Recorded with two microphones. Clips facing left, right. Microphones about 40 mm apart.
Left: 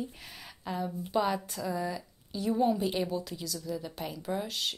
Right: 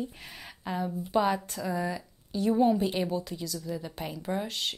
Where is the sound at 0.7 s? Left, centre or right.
Centre.